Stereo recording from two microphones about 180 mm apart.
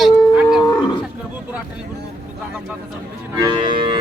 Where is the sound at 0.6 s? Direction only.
15° left (ahead or behind).